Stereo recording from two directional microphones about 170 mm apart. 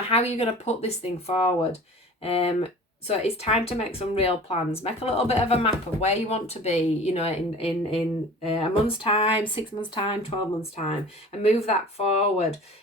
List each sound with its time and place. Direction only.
0.1 s speech: 40° left (ahead or behind)